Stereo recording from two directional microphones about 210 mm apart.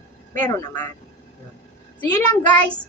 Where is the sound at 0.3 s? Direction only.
10° left (ahead or behind).